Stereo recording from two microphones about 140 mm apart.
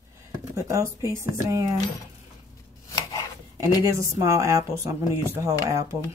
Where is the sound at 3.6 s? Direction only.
20° right (ahead or behind).